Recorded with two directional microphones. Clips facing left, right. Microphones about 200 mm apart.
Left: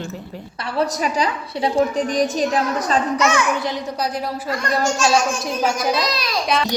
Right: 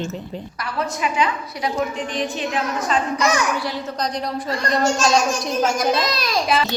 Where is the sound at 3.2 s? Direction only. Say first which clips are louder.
Left 1 dB; 35° right (ahead or behind).